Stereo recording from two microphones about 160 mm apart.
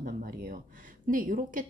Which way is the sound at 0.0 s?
65° right (ahead or behind).